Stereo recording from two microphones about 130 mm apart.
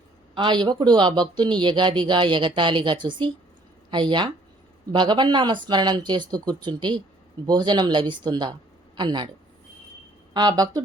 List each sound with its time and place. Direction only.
0.3 s a woman's voice: 35° right (ahead or behind)
10.3 s speech: 30° right (ahead or behind)